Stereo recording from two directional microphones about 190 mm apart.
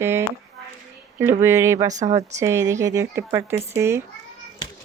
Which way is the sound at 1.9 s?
40° right (ahead or behind).